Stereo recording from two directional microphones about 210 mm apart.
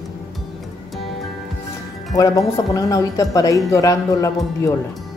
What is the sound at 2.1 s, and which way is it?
Speech, 15° left (ahead or behind).